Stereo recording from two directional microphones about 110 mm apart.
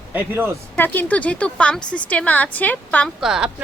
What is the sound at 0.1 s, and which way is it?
Speech, 20° right (ahead or behind).